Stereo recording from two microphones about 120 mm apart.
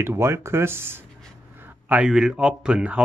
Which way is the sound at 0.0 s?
20° right (ahead or behind).